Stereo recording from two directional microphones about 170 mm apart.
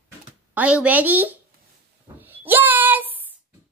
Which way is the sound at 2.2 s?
10° right (ahead or behind).